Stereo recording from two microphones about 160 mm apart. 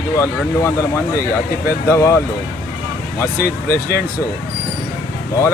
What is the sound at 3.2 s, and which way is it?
Speech, 15° left (ahead or behind).